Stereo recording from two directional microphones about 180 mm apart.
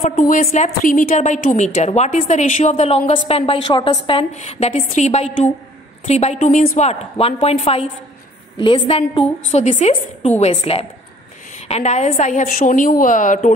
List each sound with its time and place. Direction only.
0.0 s a woman's voice: 45° left (ahead or behind)
6.9 s a woman's voice: 35° left (ahead or behind)